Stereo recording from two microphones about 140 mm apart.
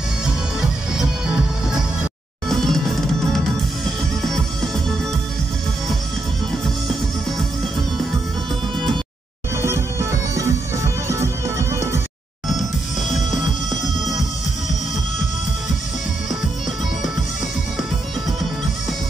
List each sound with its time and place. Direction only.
0.2 s music: 5° right (ahead or behind)
9.6 s music: 20° right (ahead or behind)